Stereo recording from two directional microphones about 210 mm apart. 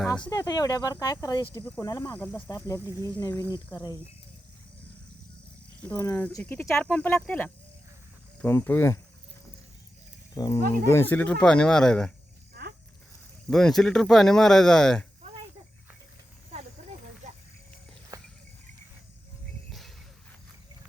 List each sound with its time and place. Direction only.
0.3 s speech: 15° left (ahead or behind)
5.9 s speech: 15° left (ahead or behind)
10.3 s speech: 20° left (ahead or behind); by 12.1 s 5° left (ahead or behind)
13.5 s speech: centre (ahead or behind)
18.1 s a sound: 15° right (ahead or behind)